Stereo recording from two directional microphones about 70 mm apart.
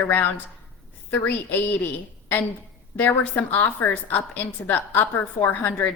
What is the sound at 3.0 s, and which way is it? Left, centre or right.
A woman's voice, left.